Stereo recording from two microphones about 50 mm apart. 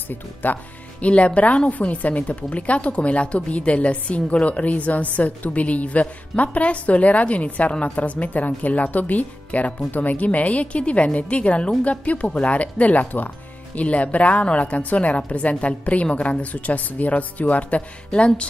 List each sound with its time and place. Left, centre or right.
0.1 s speech: left
1.0 s speech: left